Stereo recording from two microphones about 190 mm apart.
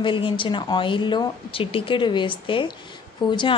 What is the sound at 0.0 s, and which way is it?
Speech, 25° left (ahead or behind).